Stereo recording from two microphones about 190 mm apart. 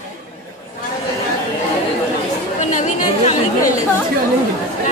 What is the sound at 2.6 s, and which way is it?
Chatter, 40° left (ahead or behind).